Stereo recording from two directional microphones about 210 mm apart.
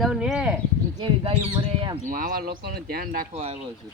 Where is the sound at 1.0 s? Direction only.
20° right (ahead or behind).